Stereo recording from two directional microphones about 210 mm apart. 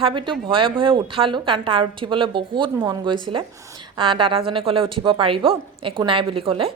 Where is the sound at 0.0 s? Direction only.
25° right (ahead or behind).